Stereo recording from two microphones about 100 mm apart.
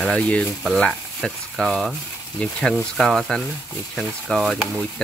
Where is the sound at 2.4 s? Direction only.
10° left (ahead or behind).